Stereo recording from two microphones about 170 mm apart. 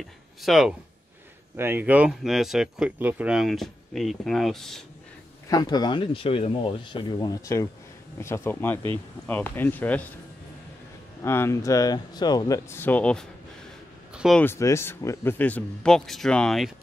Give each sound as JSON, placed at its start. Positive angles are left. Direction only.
{"t": 0.4, "sound": "speech", "side_deg": 0}
{"t": 5.5, "sound": "a man's voice", "side_deg": 25}
{"t": 11.2, "sound": "a man's voice", "side_deg": 15}
{"t": 14.4, "sound": "a man's voice", "side_deg": 15}